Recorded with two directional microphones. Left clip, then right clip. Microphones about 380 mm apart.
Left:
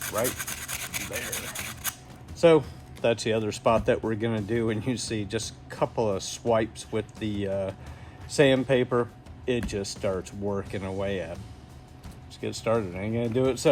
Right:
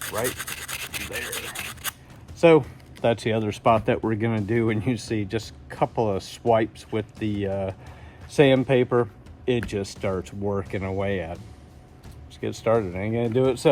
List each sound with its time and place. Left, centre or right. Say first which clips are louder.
0.0 s rub: right 1 dB; centre
2.4 s speech: right 3 dB; centre
12.6 s speech: right 5 dB; centre